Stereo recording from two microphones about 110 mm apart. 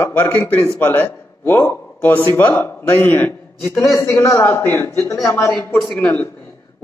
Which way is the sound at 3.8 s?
25° left (ahead or behind).